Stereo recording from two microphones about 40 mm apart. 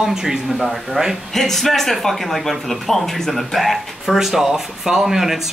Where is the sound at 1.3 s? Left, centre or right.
Centre.